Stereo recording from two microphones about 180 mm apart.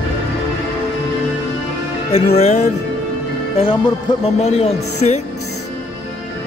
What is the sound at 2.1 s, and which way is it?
Speech, 35° left (ahead or behind).